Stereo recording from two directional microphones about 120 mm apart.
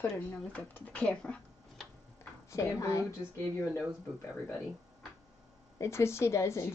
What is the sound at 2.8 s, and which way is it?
Speech, 25° left (ahead or behind).